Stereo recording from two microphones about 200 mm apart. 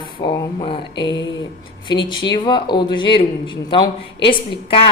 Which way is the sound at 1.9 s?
25° left (ahead or behind).